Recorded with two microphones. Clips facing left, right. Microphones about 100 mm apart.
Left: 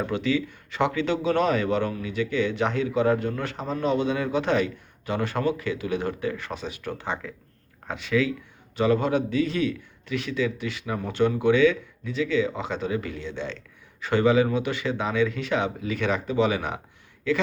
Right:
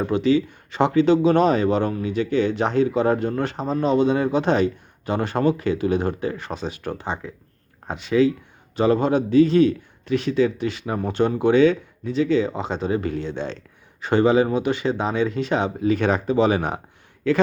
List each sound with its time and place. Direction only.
0.0 s speech: 30° right (ahead or behind)